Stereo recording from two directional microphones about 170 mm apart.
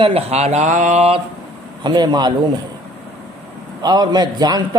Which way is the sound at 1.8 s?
25° right (ahead or behind).